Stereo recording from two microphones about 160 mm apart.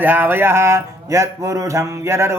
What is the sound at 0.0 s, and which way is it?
Speech, 10° right (ahead or behind).